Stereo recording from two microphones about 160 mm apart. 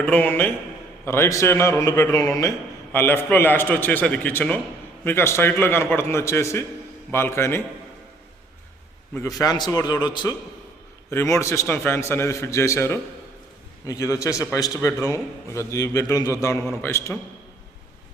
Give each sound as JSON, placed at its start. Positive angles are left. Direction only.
{"t": 0.0, "sound": "a man's voice", "side_deg": 10}
{"t": 9.2, "sound": "a man's voice", "side_deg": 25}